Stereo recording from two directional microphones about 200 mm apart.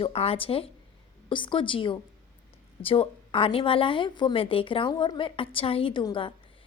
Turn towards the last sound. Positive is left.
turn(degrees=25)  # may be behind; listen again after turning